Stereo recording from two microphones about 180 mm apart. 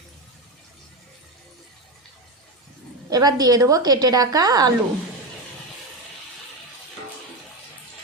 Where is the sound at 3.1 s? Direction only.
20° right (ahead or behind).